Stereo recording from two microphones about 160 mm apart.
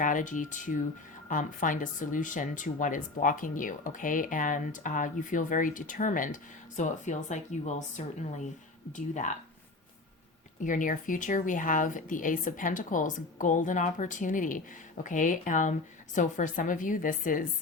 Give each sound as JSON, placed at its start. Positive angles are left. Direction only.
{"t": 0.0, "sound": "speech", "side_deg": 55}
{"t": 10.6, "sound": "speech", "side_deg": 55}